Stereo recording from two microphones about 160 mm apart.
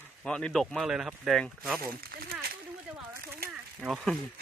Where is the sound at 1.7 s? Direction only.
70° right (ahead or behind).